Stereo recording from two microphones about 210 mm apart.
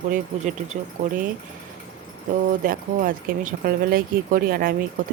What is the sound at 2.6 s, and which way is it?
Speech, 45° right (ahead or behind).